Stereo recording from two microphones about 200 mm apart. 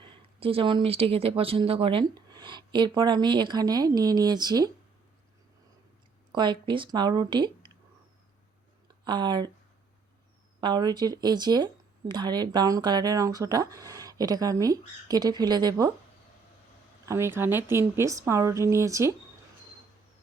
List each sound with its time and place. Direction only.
0.0 s speech: 25° right (ahead or behind)
6.3 s speech: 20° right (ahead or behind)
8.9 s speech: 20° right (ahead or behind)
10.6 s speech: 20° right (ahead or behind)
17.1 s speech: 15° right (ahead or behind)